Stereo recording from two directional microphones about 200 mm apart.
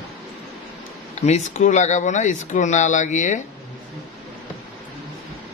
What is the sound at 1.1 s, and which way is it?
A man's voice, 35° left (ahead or behind).